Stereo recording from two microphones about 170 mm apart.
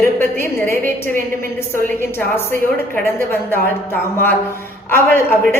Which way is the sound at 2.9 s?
10° left (ahead or behind).